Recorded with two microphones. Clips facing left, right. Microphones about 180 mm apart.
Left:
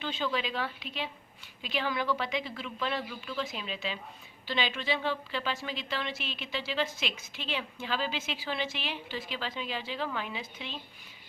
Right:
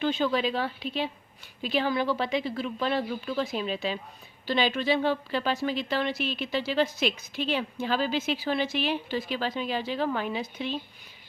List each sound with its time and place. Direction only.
0.0 s a woman's voice: 45° right (ahead or behind)